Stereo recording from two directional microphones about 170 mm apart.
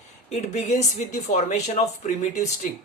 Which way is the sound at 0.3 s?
40° left (ahead or behind).